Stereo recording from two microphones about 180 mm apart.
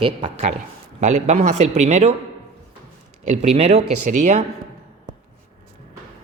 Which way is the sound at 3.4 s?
35° right (ahead or behind).